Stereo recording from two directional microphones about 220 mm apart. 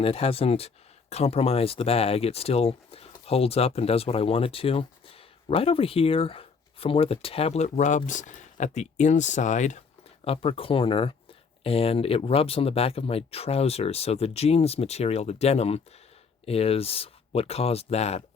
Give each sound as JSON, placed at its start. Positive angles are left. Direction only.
{"t": 0.0, "sound": "speech", "side_deg": 25}